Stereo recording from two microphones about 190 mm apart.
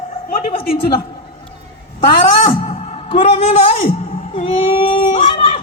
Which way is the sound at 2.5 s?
35° left (ahead or behind).